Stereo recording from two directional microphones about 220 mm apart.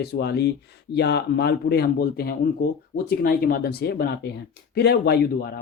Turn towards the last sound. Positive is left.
turn(degrees=45)  # may be behind; listen again after turning